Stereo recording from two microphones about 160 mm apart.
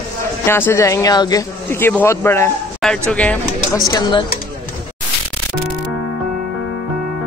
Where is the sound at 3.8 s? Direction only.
25° left (ahead or behind).